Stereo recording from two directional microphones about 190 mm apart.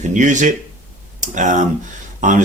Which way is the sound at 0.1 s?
40° right (ahead or behind).